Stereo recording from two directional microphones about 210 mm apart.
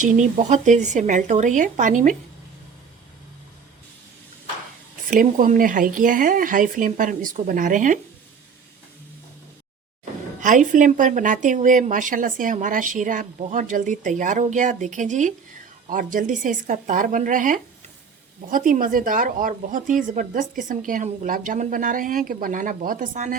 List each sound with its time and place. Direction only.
0.0 s a woman's voice: 35° right (ahead or behind)
5.1 s a woman's voice: 40° right (ahead or behind)
10.4 s a woman's voice: 40° right (ahead or behind)